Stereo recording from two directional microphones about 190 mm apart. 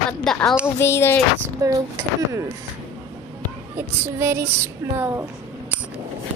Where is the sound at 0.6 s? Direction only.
15° left (ahead or behind).